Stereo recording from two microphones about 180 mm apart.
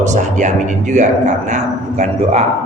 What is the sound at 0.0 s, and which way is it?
A man's voice, 40° right (ahead or behind).